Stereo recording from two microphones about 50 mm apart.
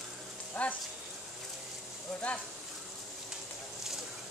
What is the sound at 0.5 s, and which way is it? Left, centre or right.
Speech, left.